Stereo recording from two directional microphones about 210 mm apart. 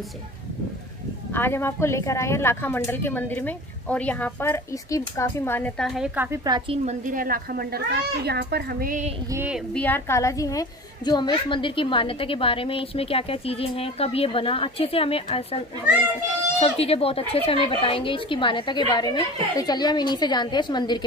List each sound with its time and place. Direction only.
1.3 s a woman's voice: 10° left (ahead or behind); by 6.8 s 20° right (ahead or behind)
6.9 s a child's voice: 40° right (ahead or behind)
9.3 s speech: 10° right (ahead or behind)
9.8 s a woman's voice: 10° left (ahead or behind)